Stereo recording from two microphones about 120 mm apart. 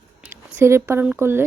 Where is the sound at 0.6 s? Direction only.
20° right (ahead or behind).